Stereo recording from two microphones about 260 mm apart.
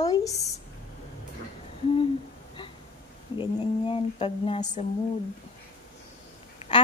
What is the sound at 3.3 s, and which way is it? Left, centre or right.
Speech, centre.